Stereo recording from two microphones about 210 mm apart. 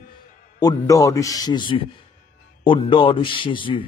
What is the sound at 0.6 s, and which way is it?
A man's voice, 15° left (ahead or behind).